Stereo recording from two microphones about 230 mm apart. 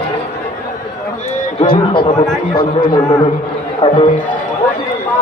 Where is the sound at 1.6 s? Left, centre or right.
Left.